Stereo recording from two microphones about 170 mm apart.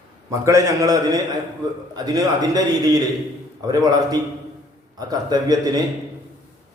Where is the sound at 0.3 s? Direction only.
20° right (ahead or behind).